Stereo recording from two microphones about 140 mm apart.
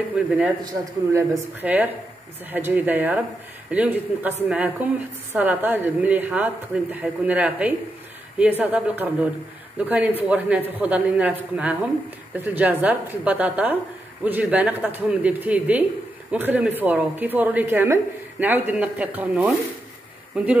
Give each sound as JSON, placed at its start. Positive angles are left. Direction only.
{"t": 0.2, "sound": "a woman's voice", "side_deg": -10}
{"t": 0.7, "sound": "a man's voice", "side_deg": -25}
{"t": 1.6, "sound": "a woman's voice", "side_deg": -10}